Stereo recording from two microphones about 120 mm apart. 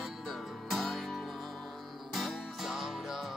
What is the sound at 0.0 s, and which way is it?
Music, centre (ahead or behind).